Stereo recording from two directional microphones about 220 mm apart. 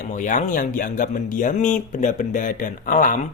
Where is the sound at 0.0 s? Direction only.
35° left (ahead or behind).